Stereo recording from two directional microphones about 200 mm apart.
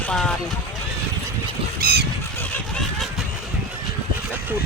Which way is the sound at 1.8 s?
55° right (ahead or behind).